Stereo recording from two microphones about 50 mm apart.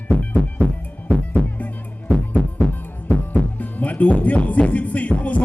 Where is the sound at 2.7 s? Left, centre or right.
Left.